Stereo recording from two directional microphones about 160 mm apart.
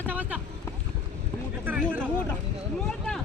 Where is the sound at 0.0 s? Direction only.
10° right (ahead or behind).